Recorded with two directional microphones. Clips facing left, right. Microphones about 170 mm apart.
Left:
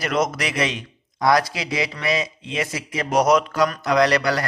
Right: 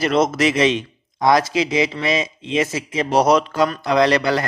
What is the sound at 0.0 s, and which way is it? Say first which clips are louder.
A man's voice: right 6 dB; 25° right (ahead or behind).